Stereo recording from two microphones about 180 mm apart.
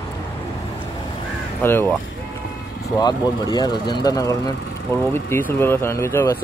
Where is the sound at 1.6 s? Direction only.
15° left (ahead or behind).